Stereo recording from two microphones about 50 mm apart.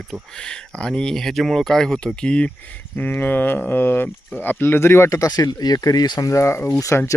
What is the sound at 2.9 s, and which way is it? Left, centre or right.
Speech, left.